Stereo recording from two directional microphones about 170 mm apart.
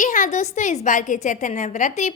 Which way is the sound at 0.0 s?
50° left (ahead or behind).